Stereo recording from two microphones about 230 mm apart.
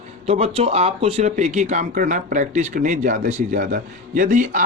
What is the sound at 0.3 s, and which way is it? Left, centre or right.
Speech, right.